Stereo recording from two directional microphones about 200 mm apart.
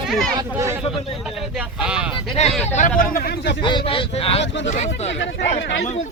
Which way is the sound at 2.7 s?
35° left (ahead or behind).